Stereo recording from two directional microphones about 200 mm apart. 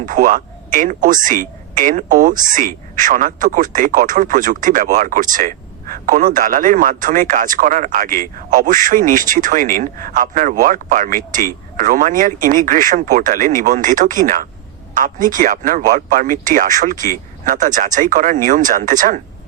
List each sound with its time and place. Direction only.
0.0 s speech: 40° right (ahead or behind)